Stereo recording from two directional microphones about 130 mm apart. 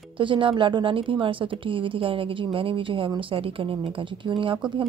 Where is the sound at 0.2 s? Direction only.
40° right (ahead or behind).